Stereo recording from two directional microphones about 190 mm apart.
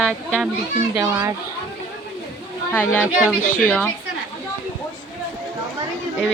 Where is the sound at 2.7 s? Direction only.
5° left (ahead or behind).